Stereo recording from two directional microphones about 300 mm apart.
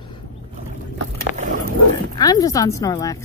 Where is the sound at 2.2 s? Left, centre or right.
Centre.